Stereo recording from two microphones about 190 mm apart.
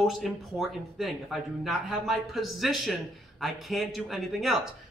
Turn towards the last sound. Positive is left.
turn(degrees=0)  # may be behind; listen again after turning